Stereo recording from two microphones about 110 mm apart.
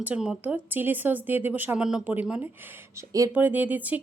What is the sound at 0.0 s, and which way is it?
Speech, 10° right (ahead or behind).